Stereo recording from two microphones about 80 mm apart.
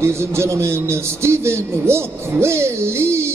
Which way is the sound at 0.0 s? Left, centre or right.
Right.